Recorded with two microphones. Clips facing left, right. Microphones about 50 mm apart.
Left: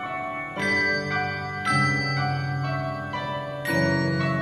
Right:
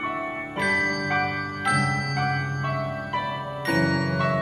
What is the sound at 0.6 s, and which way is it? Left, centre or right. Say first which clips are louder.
Music: even; centre.